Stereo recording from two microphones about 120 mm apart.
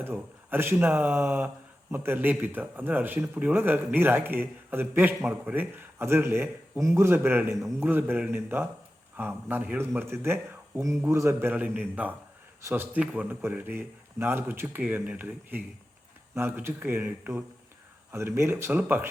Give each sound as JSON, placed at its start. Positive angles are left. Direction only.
{"t": 0.0, "sound": "a man's voice", "side_deg": -20}